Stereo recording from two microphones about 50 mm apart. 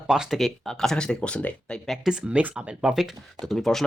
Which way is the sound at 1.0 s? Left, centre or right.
Left.